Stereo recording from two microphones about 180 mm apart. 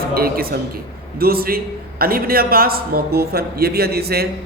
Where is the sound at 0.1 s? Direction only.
55° right (ahead or behind).